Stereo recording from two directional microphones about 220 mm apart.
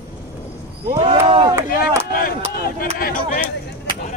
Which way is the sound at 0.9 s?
25° right (ahead or behind).